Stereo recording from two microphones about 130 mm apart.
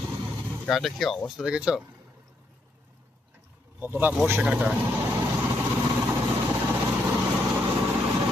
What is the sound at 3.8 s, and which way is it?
Speech, 15° right (ahead or behind).